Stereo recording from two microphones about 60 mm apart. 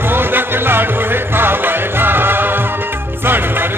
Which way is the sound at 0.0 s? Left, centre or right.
Right.